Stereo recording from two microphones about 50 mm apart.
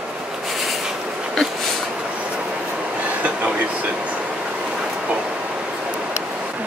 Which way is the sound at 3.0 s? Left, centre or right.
Right.